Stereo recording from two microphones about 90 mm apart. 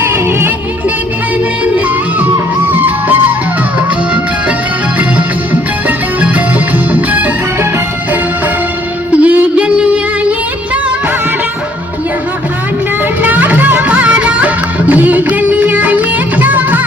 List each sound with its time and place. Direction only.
0.0 s music: 25° right (ahead or behind)
1.6 s music: 15° right (ahead or behind)
6.9 s music: 20° right (ahead or behind)
9.1 s music: 15° right (ahead or behind)
13.2 s music: 20° right (ahead or behind)